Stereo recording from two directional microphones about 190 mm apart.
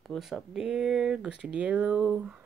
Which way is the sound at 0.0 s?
Centre (ahead or behind).